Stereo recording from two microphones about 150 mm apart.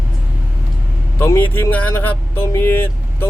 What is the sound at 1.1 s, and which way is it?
Speech, 15° left (ahead or behind).